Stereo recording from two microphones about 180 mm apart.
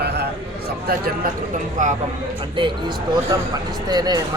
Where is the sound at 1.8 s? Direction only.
45° right (ahead or behind).